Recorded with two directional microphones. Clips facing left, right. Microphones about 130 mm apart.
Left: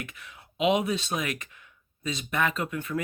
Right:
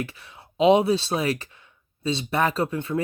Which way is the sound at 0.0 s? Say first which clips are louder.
Right 8 dB; 30° right (ahead or behind).